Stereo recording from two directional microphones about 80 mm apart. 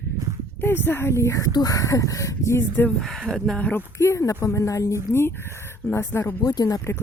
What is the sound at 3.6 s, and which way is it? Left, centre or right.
Speech, centre.